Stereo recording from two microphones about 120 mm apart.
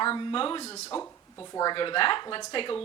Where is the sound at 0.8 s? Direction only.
15° left (ahead or behind).